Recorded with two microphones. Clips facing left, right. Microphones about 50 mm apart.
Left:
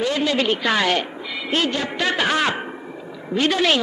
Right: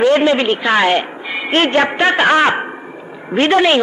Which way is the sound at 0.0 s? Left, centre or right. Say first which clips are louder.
Right 8 dB; right.